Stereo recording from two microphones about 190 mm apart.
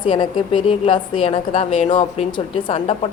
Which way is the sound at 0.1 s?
25° left (ahead or behind).